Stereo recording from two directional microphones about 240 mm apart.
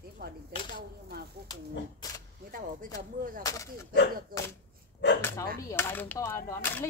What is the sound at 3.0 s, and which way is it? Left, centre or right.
Gunshot, right.